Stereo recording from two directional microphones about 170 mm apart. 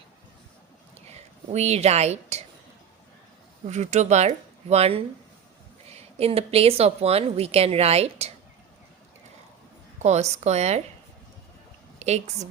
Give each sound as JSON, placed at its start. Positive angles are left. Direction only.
{"t": 1.0, "sound": "speech", "side_deg": -40}
{"t": 3.7, "sound": "speech", "side_deg": -45}
{"t": 10.0, "sound": "speech", "side_deg": -40}
{"t": 11.9, "sound": "a woman's voice", "side_deg": -40}